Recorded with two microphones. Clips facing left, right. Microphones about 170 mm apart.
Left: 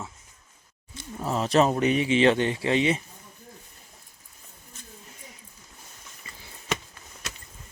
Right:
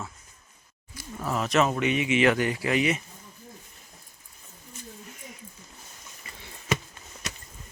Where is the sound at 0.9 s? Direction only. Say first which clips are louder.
Left 1 dB; 25° left (ahead or behind).